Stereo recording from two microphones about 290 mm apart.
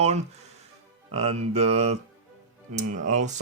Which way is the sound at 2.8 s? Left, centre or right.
Right.